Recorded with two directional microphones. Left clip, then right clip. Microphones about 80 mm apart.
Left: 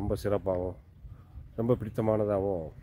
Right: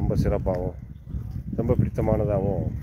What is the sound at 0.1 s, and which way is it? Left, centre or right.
Speech, centre.